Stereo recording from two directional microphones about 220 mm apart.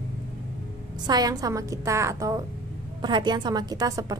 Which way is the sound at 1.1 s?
15° right (ahead or behind).